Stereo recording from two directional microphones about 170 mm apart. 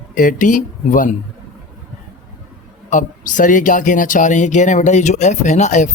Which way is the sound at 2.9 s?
50° left (ahead or behind).